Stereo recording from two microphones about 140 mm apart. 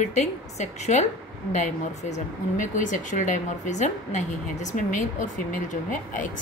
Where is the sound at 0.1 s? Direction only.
55° left (ahead or behind).